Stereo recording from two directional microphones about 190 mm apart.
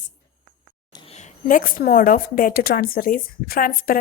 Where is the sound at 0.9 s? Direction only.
35° left (ahead or behind).